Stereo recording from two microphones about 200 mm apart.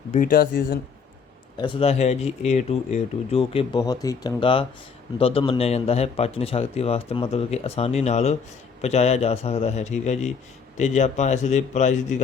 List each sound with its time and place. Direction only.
0.1 s speech: 45° left (ahead or behind)
1.5 s a man's voice: 25° left (ahead or behind)